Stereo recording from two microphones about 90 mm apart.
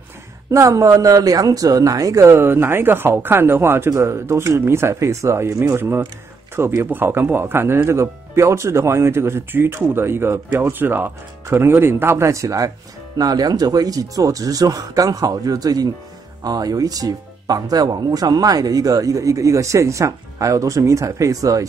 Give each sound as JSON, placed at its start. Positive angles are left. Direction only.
{"t": 0.5, "sound": "speech", "side_deg": -35}